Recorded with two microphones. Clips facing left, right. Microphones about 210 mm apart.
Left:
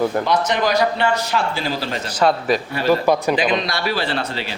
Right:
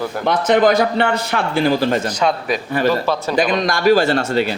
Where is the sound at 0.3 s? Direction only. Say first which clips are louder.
Right 5 dB; 55° right (ahead or behind).